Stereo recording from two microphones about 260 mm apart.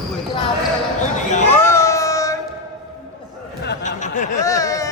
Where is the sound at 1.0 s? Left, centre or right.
Left.